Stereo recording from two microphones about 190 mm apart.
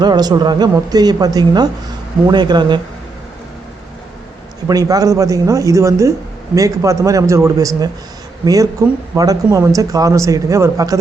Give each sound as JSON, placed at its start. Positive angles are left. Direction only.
{"t": 0.0, "sound": "speech", "side_deg": -20}
{"t": 4.7, "sound": "speech", "side_deg": -20}